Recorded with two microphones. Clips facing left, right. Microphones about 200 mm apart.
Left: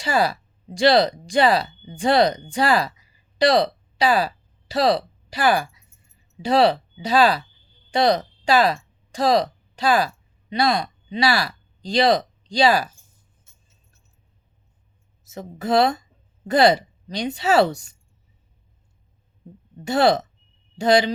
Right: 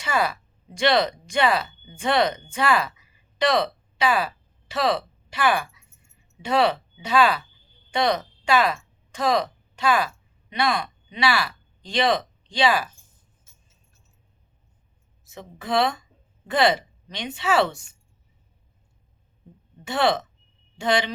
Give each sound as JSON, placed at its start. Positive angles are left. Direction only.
{"t": 0.0, "sound": "a woman's voice", "side_deg": 35}
{"t": 15.2, "sound": "a woman's voice", "side_deg": 40}
{"t": 19.8, "sound": "a woman's voice", "side_deg": 40}